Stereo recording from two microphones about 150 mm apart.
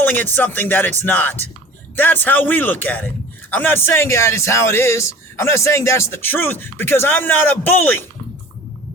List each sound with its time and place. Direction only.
0.0 s speech: 15° left (ahead or behind)